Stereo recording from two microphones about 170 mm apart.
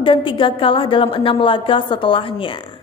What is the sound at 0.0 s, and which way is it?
A woman's voice, 30° left (ahead or behind).